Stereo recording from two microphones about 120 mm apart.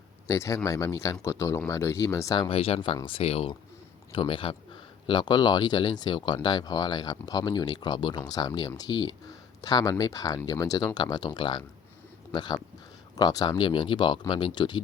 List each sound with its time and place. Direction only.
0.3 s speech: 25° left (ahead or behind)
2.5 s speech: 55° left (ahead or behind)